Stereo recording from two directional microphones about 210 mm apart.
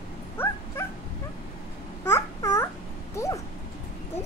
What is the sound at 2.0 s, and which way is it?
Babbling, 15° left (ahead or behind).